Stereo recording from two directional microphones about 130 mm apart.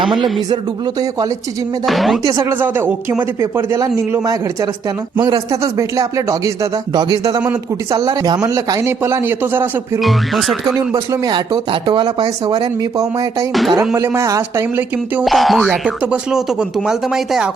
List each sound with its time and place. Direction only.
1.9 s speech: centre (ahead or behind)
2.2 s a man's voice: 20° right (ahead or behind)
10.0 s speech: centre (ahead or behind)
10.8 s speech: 25° right (ahead or behind)
13.5 s speech: centre (ahead or behind)
13.7 s a man's voice: 20° right (ahead or behind)
15.2 s speech: centre (ahead or behind)